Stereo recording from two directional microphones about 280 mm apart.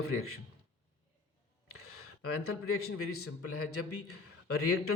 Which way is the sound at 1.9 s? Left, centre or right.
Left.